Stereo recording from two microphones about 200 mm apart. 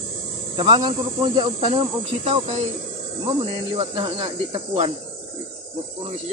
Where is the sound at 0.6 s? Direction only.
25° right (ahead or behind).